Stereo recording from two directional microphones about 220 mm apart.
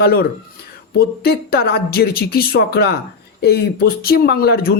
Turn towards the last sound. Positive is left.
turn(degrees=45)  # may be behind; listen again after turning